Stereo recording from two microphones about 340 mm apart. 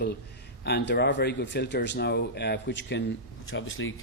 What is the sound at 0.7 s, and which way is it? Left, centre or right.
A man's voice, left.